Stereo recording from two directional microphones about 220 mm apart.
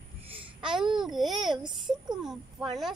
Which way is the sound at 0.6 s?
5° right (ahead or behind).